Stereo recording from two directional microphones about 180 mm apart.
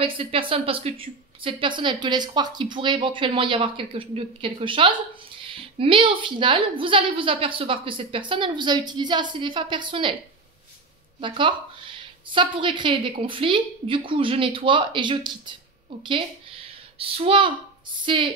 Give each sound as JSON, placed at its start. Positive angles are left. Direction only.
{"t": 0.0, "sound": "a woman's voice", "side_deg": -30}
{"t": 11.1, "sound": "a woman's voice", "side_deg": -30}